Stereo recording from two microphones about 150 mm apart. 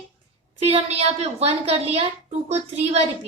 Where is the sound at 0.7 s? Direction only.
45° right (ahead or behind).